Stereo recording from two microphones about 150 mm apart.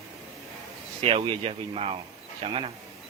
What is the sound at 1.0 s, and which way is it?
Speech, 35° right (ahead or behind).